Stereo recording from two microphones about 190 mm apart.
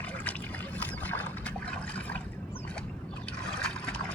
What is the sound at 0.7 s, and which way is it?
Trickle, 10° left (ahead or behind).